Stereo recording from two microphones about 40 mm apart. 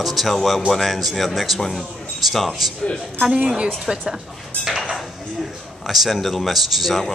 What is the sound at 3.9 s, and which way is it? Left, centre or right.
Speech, right.